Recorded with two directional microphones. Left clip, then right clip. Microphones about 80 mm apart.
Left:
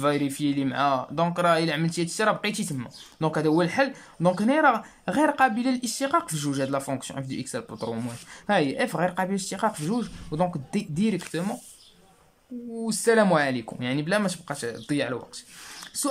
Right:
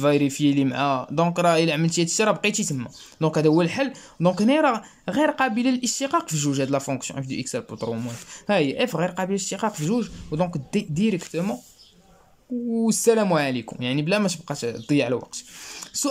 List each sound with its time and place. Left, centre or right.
0.0 s speech: centre
5.6 s speech: centre
12.7 s speech: right
13.2 s speech: centre
15.0 s speech: right
15.7 s a sound: centre